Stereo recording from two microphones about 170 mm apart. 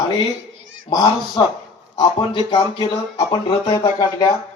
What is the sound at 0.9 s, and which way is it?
A man's voice, 25° left (ahead or behind).